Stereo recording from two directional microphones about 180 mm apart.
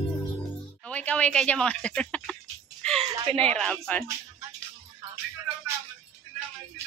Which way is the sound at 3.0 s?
30° right (ahead or behind).